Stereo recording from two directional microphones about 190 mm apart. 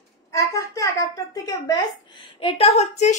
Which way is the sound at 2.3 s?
30° left (ahead or behind).